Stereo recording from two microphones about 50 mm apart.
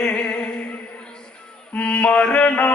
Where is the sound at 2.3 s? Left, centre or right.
Left.